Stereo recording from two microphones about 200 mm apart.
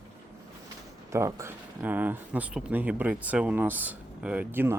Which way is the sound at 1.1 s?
15° right (ahead or behind).